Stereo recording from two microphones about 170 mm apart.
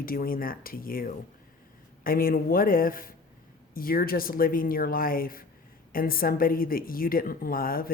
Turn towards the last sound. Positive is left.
turn(degrees=60)  # may be behind; listen again after turning